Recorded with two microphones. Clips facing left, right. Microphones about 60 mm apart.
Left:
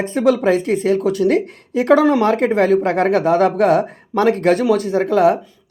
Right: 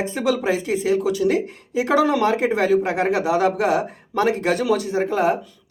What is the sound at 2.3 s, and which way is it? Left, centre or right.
Speech, left.